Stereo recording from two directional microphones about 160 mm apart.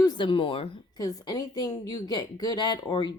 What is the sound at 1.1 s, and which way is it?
Speech, 25° left (ahead or behind).